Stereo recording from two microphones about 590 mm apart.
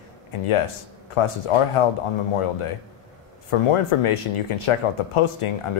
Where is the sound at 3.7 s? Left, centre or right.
Left.